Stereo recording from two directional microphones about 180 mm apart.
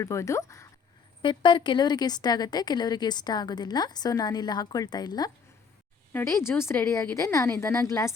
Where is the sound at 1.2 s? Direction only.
25° left (ahead or behind).